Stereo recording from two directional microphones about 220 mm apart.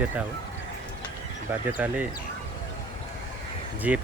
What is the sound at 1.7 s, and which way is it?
Speech, 5° right (ahead or behind).